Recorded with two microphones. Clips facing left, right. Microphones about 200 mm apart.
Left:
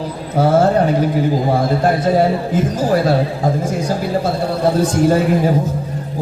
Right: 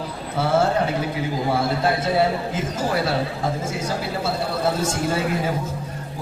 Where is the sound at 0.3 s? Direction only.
45° left (ahead or behind).